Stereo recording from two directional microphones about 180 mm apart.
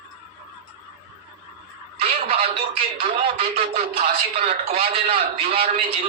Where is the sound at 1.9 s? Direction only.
30° right (ahead or behind).